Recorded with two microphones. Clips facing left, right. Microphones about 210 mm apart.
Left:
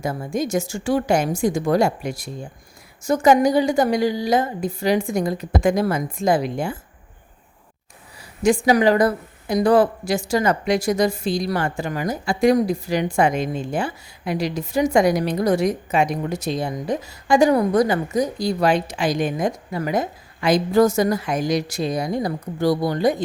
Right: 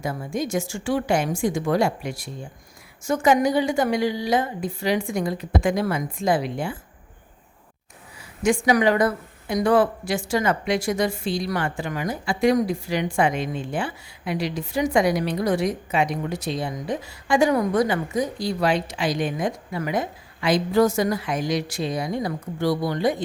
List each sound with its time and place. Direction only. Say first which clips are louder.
0.0 s speech: left 3 dB; 40° left (ahead or behind)
8.4 s speech: left 3 dB; 35° left (ahead or behind)